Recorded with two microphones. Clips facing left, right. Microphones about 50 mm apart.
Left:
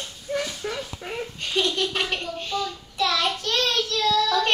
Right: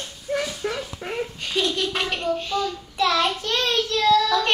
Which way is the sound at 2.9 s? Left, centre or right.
Centre.